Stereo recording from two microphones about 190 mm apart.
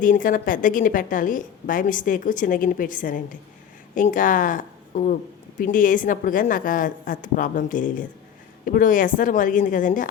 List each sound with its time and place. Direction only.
0.0 s a woman's voice: 45° left (ahead or behind)